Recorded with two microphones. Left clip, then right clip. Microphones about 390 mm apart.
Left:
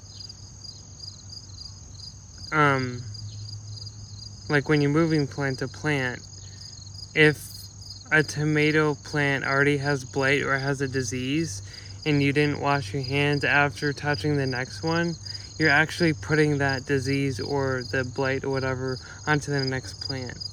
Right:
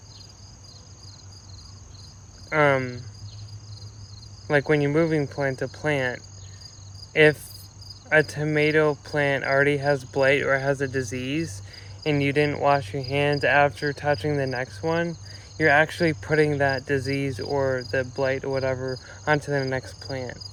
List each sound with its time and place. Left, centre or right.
2.5 s speech: centre
4.4 s speech: centre